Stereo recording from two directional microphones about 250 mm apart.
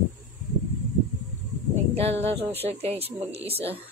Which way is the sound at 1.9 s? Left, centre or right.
Right.